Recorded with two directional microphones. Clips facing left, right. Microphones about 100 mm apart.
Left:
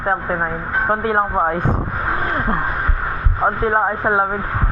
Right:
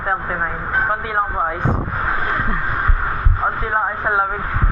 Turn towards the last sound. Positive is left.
turn(degrees=30)  # may be behind; listen again after turning